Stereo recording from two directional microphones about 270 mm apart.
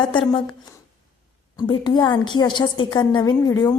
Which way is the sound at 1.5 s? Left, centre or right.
Centre.